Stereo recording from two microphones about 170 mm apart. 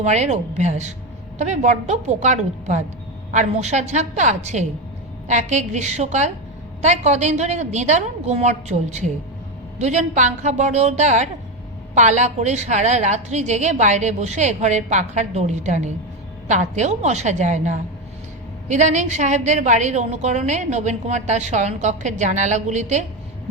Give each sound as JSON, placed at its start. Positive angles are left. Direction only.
{"t": 0.0, "sound": "a woman's voice", "side_deg": -40}